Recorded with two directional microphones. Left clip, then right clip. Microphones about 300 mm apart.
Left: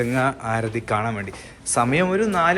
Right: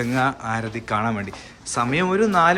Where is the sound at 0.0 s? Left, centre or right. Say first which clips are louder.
Even; centre.